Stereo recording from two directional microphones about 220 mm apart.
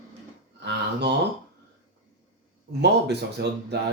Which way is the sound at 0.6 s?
50° right (ahead or behind).